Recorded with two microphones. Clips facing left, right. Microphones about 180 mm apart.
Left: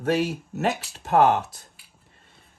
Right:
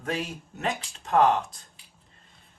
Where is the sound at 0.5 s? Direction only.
5° left (ahead or behind).